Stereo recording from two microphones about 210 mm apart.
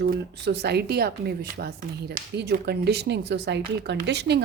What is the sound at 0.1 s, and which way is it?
Speech, 50° right (ahead or behind).